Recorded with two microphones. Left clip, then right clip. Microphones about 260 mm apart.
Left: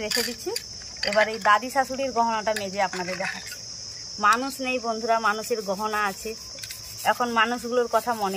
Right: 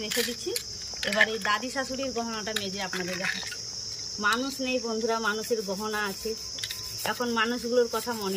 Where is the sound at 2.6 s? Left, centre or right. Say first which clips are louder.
Left 8 dB; centre.